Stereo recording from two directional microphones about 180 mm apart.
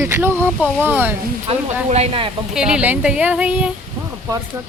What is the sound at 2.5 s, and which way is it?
A woman's voice, 5° right (ahead or behind).